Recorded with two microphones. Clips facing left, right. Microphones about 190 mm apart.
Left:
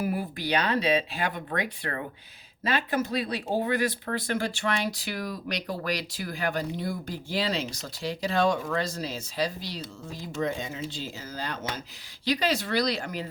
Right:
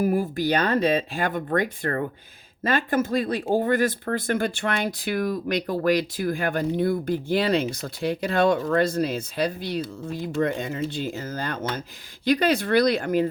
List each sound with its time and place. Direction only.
0.0 s speech: 45° right (ahead or behind)